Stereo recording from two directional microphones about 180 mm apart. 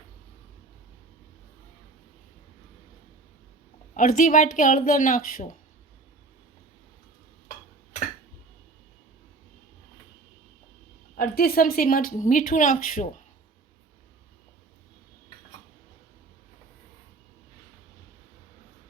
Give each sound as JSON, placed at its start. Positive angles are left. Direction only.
{"t": 3.9, "sound": "a woman's voice", "side_deg": 50}
{"t": 11.2, "sound": "a woman's voice", "side_deg": 55}